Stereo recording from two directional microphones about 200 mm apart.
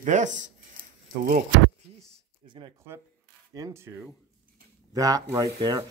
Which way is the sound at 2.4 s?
25° right (ahead or behind).